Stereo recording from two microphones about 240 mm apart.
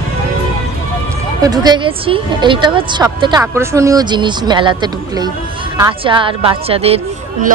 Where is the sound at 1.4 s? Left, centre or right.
Centre.